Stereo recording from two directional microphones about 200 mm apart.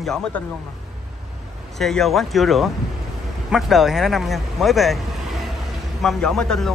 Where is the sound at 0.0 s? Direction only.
Centre (ahead or behind).